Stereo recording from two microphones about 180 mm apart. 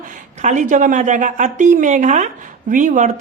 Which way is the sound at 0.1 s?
45° right (ahead or behind).